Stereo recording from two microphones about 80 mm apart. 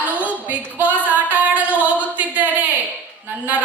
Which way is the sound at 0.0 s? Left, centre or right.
Centre.